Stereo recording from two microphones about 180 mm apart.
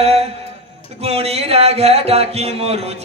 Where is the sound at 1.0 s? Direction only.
35° right (ahead or behind).